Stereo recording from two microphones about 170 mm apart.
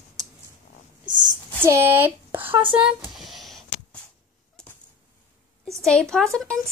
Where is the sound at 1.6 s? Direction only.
15° right (ahead or behind).